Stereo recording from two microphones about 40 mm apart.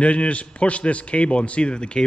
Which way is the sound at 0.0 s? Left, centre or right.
Left.